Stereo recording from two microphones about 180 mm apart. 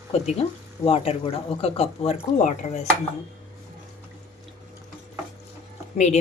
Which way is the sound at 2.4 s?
45° left (ahead or behind).